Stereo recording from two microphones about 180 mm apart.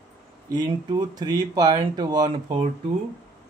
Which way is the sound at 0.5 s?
25° right (ahead or behind).